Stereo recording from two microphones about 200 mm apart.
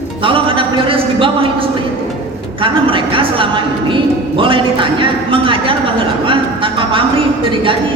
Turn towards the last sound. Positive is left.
turn(degrees=-25)  # may be behind; listen again after turning